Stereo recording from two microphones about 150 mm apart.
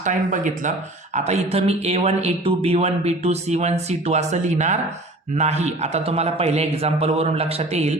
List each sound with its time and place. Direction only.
0.0 s speech: 60° right (ahead or behind)
1.1 s a man's voice: 45° right (ahead or behind)